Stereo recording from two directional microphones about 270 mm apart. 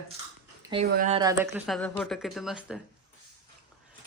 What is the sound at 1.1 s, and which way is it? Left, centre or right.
Speech, centre.